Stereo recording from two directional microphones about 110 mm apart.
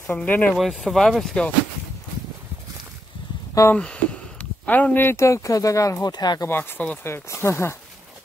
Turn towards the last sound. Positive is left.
turn(degrees=25)  # may be behind; listen again after turning